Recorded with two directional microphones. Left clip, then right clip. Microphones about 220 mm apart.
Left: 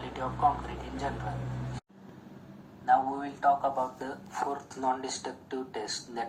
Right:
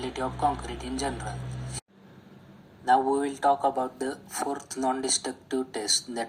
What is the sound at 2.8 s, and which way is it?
Speech, 30° right (ahead or behind).